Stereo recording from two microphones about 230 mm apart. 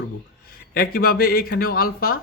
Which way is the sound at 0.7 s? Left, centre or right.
Left.